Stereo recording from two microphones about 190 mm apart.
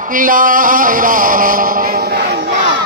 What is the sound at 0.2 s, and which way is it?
Speech, 45° right (ahead or behind).